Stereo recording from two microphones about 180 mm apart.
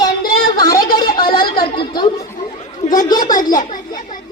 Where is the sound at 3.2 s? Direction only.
50° left (ahead or behind).